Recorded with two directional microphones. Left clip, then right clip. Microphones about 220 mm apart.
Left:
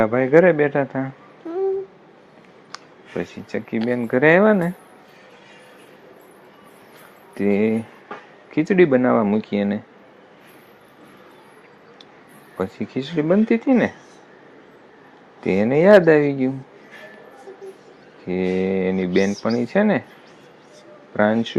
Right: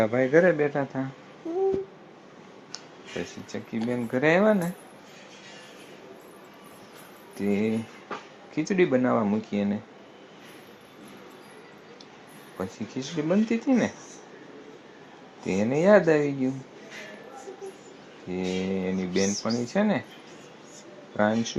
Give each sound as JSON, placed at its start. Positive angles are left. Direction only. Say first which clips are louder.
{"t": 0.0, "sound": "speech", "louder": "left 6 dB", "side_deg": 35}
{"t": 1.5, "sound": "a sound", "louder": "left 3 dB", "side_deg": 15}
{"t": 3.5, "sound": "speech", "louder": "left 8 dB", "side_deg": 35}
{"t": 7.3, "sound": "speech", "louder": "left 8 dB", "side_deg": 35}
{"t": 12.5, "sound": "speech", "louder": "left 8 dB", "side_deg": 35}
{"t": 15.4, "sound": "speech", "louder": "left 7 dB", "side_deg": 35}
{"t": 18.3, "sound": "speech", "louder": "left 9 dB", "side_deg": 35}
{"t": 21.2, "sound": "speech", "louder": "left 6 dB", "side_deg": 35}